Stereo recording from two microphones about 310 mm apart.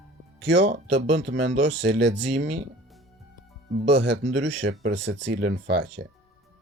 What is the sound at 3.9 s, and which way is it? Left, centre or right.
Speech, right.